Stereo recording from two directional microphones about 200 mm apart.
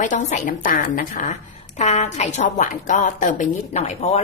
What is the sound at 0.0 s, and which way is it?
A woman's voice, 35° left (ahead or behind).